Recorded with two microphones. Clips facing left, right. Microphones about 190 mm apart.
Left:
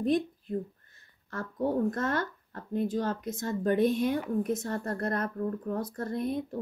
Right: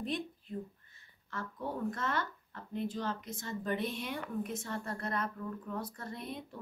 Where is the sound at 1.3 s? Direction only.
45° left (ahead or behind).